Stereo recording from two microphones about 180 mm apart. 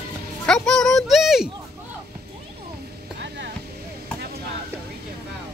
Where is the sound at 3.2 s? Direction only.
70° right (ahead or behind).